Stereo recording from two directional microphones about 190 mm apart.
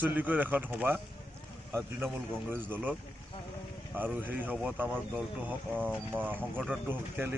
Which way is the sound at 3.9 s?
10° right (ahead or behind).